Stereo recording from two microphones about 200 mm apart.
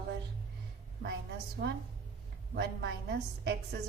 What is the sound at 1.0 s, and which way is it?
A woman's voice, 55° right (ahead or behind).